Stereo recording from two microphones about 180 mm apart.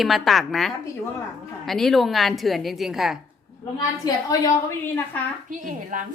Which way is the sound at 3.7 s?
20° left (ahead or behind).